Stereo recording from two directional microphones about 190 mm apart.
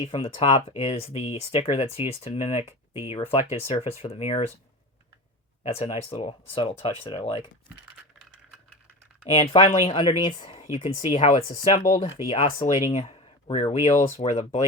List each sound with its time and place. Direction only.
0.0 s speech: 30° left (ahead or behind)
5.6 s speech: 30° left (ahead or behind)
9.3 s speech: 35° left (ahead or behind)